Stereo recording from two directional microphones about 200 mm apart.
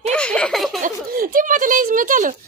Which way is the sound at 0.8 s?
45° right (ahead or behind).